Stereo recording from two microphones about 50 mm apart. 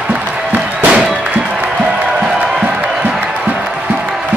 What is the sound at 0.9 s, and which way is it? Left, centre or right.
Music, centre.